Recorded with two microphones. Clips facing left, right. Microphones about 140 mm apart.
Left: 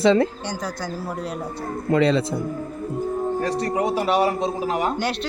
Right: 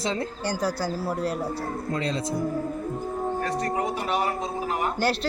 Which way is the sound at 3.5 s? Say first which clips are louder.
Left 4 dB; 80° left.